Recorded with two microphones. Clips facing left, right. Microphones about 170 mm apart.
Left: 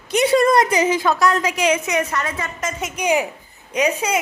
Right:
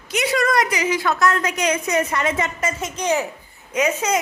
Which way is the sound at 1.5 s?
25° left (ahead or behind).